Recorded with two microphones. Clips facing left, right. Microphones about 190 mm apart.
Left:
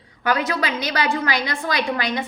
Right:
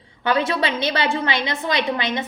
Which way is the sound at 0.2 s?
25° right (ahead or behind).